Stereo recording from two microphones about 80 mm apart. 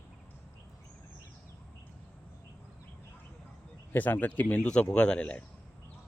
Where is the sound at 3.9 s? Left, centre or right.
Left.